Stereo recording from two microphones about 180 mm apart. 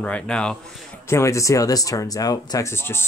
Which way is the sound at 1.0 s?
15° left (ahead or behind).